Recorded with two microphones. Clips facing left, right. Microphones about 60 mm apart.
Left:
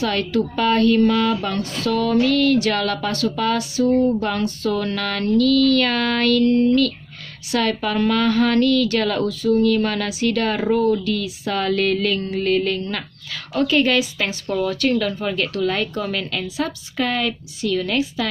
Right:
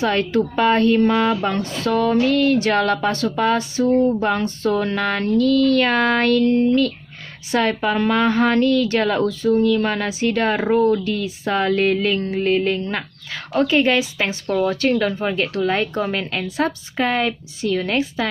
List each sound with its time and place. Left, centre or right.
0.0 s music: right
7.5 s music: right
9.2 s speech: right
10.0 s music: right